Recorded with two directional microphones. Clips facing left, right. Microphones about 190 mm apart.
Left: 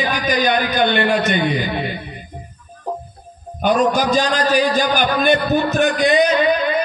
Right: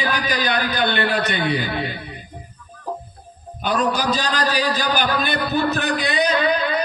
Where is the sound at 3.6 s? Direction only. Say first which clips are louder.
Left 5 dB; 50° left (ahead or behind).